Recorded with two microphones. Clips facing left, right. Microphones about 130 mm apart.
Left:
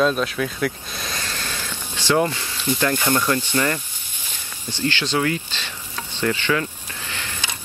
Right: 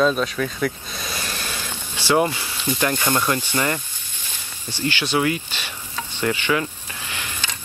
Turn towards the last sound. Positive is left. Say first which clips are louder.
# even
turn(degrees=-15)  # may be behind; listen again after turning